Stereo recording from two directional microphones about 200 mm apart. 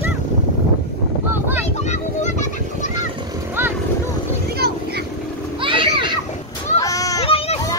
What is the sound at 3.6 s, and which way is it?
Vehicle, 10° right (ahead or behind).